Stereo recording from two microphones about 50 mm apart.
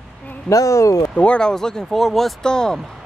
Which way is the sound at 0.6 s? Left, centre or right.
Left.